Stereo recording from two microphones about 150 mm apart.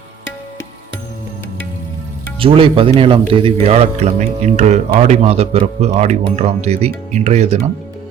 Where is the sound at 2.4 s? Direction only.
35° right (ahead or behind).